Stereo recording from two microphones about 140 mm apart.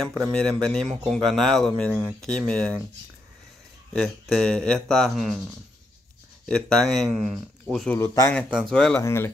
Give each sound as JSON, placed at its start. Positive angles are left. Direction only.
{"t": 0.0, "sound": "speech", "side_deg": 5}
{"t": 3.9, "sound": "speech", "side_deg": 5}
{"t": 6.4, "sound": "speech", "side_deg": 5}
{"t": 8.0, "sound": "speech", "side_deg": 20}
{"t": 8.6, "sound": "speech", "side_deg": 5}
{"t": 8.9, "sound": "speech", "side_deg": 15}